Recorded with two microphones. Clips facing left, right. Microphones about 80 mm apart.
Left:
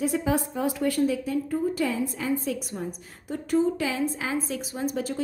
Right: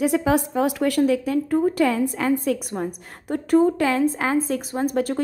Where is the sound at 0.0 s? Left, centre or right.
Right.